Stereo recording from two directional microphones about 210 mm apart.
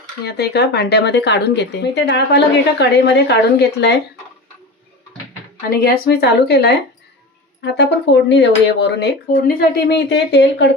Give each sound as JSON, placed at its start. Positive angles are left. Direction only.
{"t": 0.3, "sound": "speech", "side_deg": 50}
{"t": 5.8, "sound": "speech", "side_deg": 50}